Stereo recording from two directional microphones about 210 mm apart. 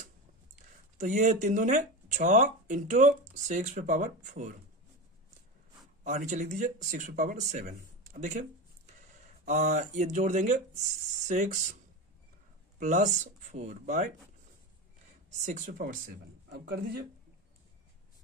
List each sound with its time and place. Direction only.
0.9 s speech: 35° right (ahead or behind)
6.0 s speech: 35° right (ahead or behind)
12.7 s speech: 40° right (ahead or behind)
15.2 s a man's voice: 35° right (ahead or behind)